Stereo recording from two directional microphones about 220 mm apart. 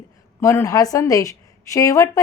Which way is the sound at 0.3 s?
10° left (ahead or behind).